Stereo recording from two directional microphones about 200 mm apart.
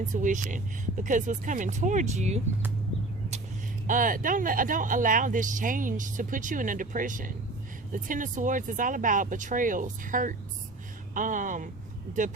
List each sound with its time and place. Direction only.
0.0 s speech: 40° right (ahead or behind)
3.8 s speech: 40° right (ahead or behind)